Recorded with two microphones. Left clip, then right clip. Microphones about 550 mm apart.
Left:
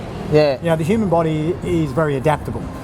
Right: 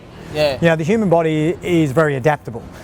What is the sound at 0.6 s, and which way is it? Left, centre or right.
Speech, right.